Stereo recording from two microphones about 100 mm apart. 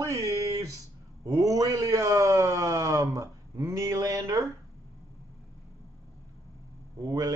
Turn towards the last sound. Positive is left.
turn(degrees=-40)  # may be behind; listen again after turning